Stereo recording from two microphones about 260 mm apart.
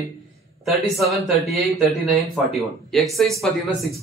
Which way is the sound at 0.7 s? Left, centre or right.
Centre.